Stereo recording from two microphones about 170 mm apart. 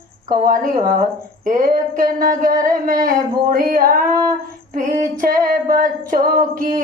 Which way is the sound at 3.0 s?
55° right (ahead or behind).